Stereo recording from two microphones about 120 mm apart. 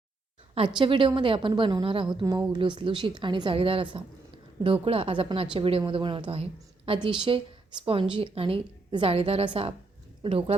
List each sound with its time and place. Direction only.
0.5 s a woman's voice: 45° right (ahead or behind)
2.2 s a woman's voice: 35° right (ahead or behind); by 10.5 s 50° right (ahead or behind)